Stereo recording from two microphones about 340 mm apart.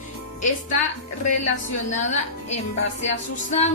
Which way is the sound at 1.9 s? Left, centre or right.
Left.